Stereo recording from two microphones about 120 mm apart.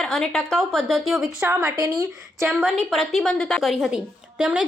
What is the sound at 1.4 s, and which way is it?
Speech, 15° right (ahead or behind).